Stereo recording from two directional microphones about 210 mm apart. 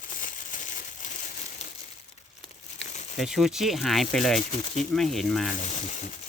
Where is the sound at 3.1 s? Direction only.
Centre (ahead or behind).